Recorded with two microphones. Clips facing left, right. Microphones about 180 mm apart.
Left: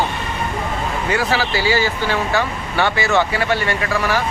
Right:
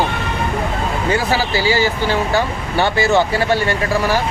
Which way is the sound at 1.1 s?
30° right (ahead or behind).